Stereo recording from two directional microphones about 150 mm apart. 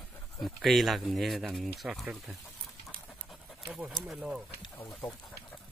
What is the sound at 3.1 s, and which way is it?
Pant, 5° left (ahead or behind).